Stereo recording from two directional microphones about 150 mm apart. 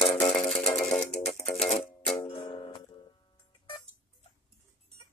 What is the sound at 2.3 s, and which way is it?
Music, 35° left (ahead or behind).